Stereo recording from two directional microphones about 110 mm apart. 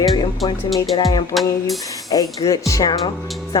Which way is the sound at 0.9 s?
45° left (ahead or behind).